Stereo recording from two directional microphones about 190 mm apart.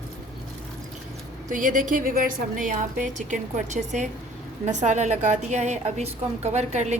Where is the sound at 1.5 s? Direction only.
45° right (ahead or behind).